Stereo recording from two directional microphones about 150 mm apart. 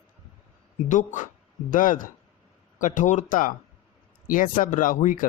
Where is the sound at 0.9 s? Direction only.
55° left (ahead or behind).